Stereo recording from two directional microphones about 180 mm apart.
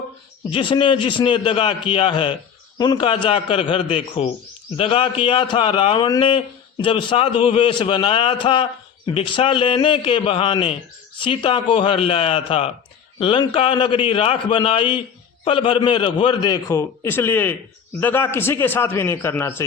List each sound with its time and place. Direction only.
0.5 s a man's voice: 25° left (ahead or behind)